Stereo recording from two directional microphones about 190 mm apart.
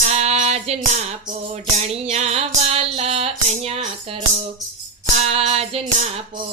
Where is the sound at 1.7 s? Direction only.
35° right (ahead or behind).